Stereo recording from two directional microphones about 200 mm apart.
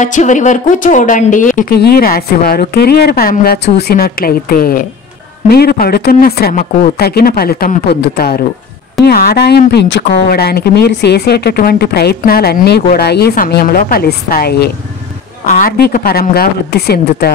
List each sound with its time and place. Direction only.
0.0 s speech: 40° left (ahead or behind)